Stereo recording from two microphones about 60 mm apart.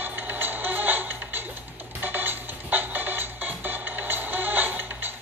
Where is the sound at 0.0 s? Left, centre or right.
Right.